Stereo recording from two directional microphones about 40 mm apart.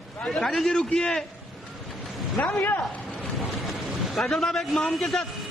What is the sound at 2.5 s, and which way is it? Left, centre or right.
Speech, left.